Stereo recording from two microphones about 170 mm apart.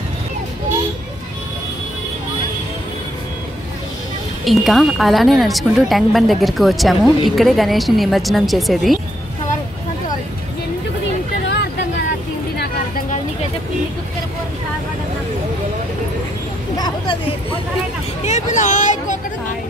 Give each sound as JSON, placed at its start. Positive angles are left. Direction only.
{"t": 4.5, "sound": "speech", "side_deg": 0}
{"t": 16.7, "sound": "a sound", "side_deg": 25}
{"t": 18.2, "sound": "vehicle", "side_deg": 45}